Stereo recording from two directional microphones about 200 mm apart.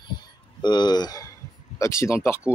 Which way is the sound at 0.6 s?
20° left (ahead or behind).